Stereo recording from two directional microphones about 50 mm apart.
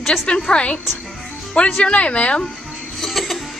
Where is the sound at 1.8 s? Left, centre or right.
Left.